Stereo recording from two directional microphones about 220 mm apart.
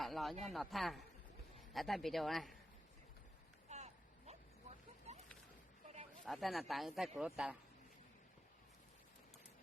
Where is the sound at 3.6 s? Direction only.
30° right (ahead or behind).